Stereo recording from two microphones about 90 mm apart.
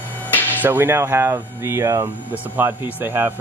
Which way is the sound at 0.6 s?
25° right (ahead or behind).